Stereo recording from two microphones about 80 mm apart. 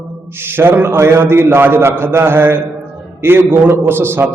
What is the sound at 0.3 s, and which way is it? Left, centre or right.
A man's voice, right.